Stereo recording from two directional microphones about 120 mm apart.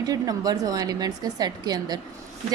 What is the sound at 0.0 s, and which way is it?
A woman's voice, 30° right (ahead or behind).